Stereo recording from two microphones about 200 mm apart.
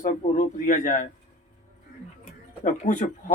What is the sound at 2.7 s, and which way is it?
Speech, 40° left (ahead or behind).